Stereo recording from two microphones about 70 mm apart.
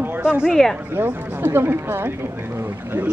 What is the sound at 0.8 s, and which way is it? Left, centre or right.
Speech, right.